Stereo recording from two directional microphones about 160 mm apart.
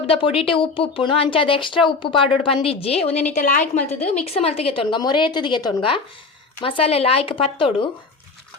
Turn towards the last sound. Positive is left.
turn(degrees=35)  # may be behind; listen again after turning